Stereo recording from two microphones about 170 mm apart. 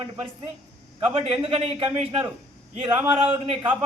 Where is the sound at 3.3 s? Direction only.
25° right (ahead or behind).